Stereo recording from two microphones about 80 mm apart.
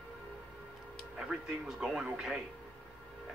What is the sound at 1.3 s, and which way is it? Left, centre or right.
A man's voice, centre.